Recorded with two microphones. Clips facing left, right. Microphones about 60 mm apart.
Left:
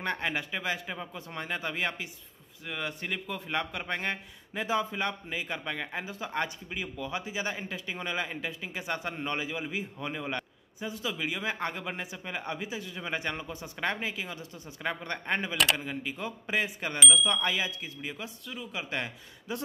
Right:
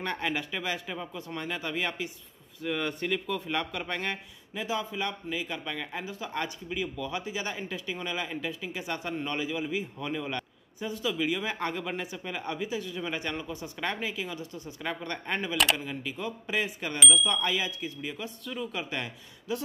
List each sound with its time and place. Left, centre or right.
0.0 s a man's voice: left
2.6 s a man's voice: centre
4.6 s a man's voice: left
15.5 s speech: centre
15.8 s a man's voice: left
18.5 s speech: centre
18.9 s a man's voice: left